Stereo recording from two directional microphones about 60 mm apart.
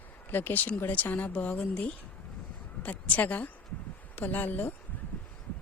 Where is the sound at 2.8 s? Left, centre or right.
Left.